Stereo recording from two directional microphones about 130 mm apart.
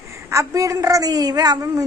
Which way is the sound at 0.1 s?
20° right (ahead or behind).